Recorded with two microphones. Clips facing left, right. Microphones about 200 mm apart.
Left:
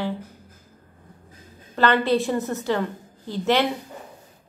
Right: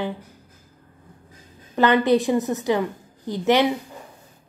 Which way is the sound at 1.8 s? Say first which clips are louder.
Right 3 dB; 15° right (ahead or behind).